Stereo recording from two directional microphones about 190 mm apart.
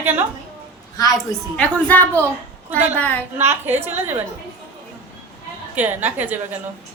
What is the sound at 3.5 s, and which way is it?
Speech, 10° right (ahead or behind).